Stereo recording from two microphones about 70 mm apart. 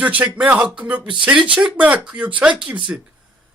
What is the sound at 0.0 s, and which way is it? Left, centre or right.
Speech, centre.